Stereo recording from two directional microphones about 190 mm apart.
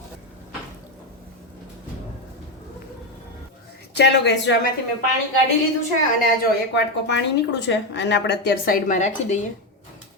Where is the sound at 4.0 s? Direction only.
65° left (ahead or behind).